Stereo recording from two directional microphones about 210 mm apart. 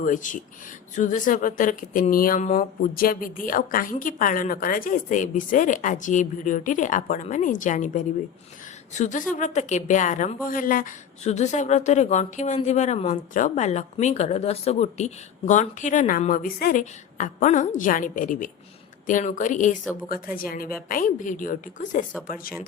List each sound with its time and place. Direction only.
0.0 s a woman's voice: 40° left (ahead or behind)